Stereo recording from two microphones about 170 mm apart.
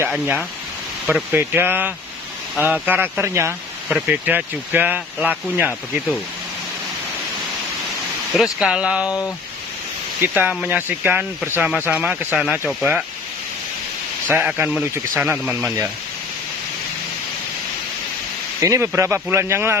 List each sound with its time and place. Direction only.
0.1 s speech: centre (ahead or behind)
8.3 s speech: centre (ahead or behind)
9.0 s speech: 20° left (ahead or behind)
10.2 s speech: 10° right (ahead or behind)
14.3 s speech: 10° right (ahead or behind)
18.6 s speech: 15° right (ahead or behind)